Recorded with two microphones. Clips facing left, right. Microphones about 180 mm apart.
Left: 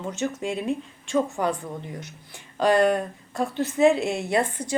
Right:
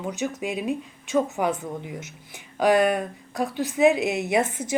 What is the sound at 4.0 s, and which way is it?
Speech, 15° right (ahead or behind).